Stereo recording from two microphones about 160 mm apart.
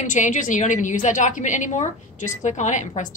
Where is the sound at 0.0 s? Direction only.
50° left (ahead or behind).